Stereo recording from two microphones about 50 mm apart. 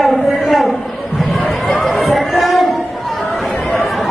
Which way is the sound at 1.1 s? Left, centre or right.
Centre.